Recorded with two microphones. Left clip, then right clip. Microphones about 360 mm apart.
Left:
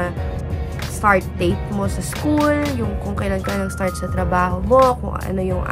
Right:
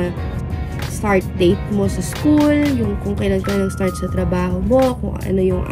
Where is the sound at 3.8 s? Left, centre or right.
Left.